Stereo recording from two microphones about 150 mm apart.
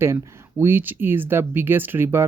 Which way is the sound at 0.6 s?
15° right (ahead or behind).